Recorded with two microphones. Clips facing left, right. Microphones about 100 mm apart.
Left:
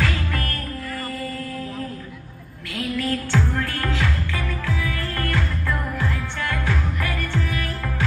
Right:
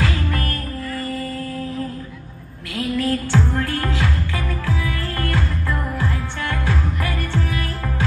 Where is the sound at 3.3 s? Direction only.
20° right (ahead or behind).